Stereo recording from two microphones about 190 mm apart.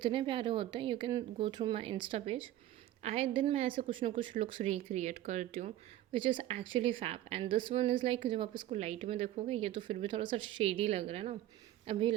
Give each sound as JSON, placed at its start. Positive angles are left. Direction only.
{"t": 0.0, "sound": "a woman's voice", "side_deg": -25}
{"t": 6.1, "sound": "a woman's voice", "side_deg": -25}